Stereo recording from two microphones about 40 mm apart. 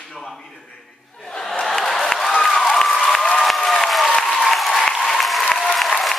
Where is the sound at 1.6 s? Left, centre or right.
Centre.